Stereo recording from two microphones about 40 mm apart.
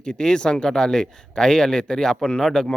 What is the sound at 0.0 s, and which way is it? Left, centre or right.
Speech, left.